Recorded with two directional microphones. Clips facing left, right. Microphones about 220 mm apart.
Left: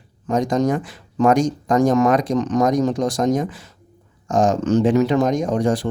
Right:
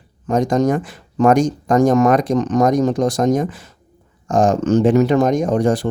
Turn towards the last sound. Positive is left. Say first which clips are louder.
# right 3 dB
turn(degrees=-55)  # may be behind; listen again after turning